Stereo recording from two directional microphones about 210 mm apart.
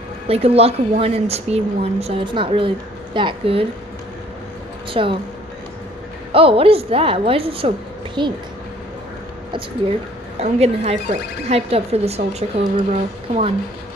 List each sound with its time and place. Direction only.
0.3 s speech: 30° right (ahead or behind)
5.0 s speech: 25° right (ahead or behind)
6.3 s speech: 25° right (ahead or behind)
10.4 s speech: 30° right (ahead or behind)